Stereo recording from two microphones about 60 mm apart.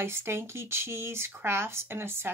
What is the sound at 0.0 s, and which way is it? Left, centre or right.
Speech, right.